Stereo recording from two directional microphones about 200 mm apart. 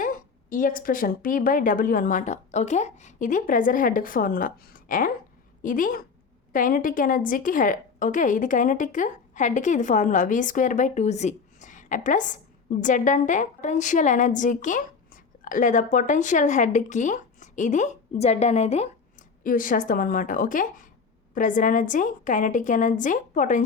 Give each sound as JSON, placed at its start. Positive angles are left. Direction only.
{"t": 0.0, "sound": "a woman's voice", "side_deg": 45}
{"t": 19.4, "sound": "a woman's voice", "side_deg": 40}